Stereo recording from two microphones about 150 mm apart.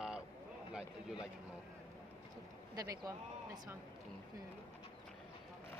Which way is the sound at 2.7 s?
25° right (ahead or behind).